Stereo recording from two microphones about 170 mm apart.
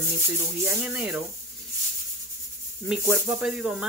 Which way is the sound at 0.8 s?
5° right (ahead or behind).